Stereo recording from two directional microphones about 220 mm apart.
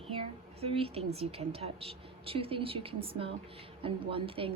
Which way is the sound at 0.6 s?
25° right (ahead or behind).